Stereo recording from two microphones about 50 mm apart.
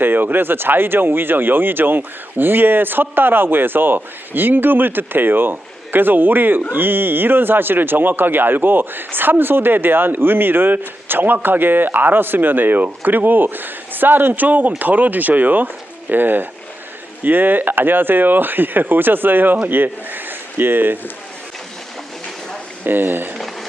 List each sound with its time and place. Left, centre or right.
0.0 s speech: right
22.8 s speech: right